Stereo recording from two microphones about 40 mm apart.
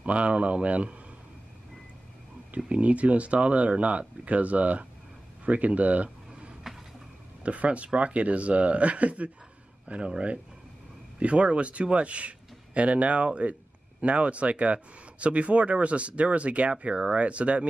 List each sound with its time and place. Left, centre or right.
0.0 s speech: right
2.5 s speech: right
6.7 s a sound: centre
7.4 s speech: right